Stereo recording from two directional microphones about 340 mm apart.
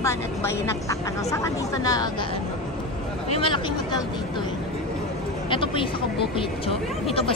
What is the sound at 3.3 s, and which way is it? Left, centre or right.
Speech, centre.